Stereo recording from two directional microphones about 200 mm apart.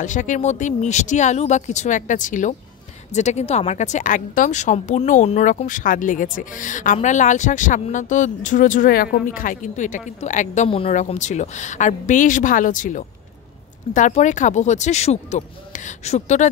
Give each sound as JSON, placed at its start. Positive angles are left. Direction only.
{"t": 0.0, "sound": "speech", "side_deg": 40}